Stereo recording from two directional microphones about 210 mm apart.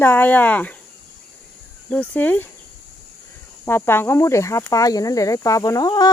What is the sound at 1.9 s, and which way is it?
Speech, 5° left (ahead or behind).